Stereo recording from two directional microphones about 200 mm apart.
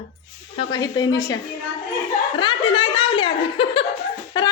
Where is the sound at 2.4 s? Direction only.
25° left (ahead or behind).